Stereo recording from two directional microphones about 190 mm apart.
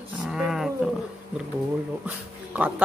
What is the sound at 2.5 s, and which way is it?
Speech, 10° right (ahead or behind).